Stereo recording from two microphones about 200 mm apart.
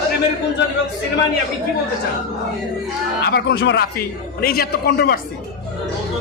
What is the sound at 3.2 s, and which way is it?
A man's voice, 55° left (ahead or behind).